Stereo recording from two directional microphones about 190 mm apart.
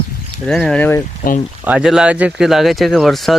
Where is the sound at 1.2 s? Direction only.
40° left (ahead or behind).